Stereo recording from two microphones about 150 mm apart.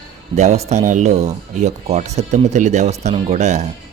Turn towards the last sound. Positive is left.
turn(degrees=-50)  # may be behind; listen again after turning